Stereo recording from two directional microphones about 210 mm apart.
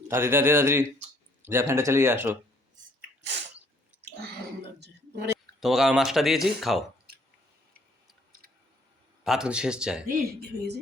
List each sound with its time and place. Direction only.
0.1 s speech: 10° right (ahead or behind)
5.5 s speech: centre (ahead or behind)
9.2 s speech: centre (ahead or behind)
10.1 s speech: 45° right (ahead or behind)